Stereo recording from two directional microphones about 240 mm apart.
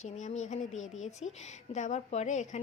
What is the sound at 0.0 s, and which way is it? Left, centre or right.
Speech, left.